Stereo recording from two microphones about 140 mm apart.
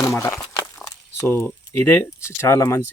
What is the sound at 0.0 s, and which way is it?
Speech, 20° left (ahead or behind).